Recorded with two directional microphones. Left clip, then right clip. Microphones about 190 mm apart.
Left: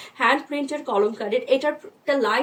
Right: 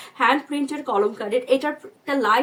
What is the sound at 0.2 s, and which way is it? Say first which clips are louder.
Speech: right 1 dB; 25° right (ahead or behind).